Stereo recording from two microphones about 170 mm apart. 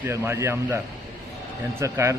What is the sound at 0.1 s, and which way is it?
Speech, 15° right (ahead or behind).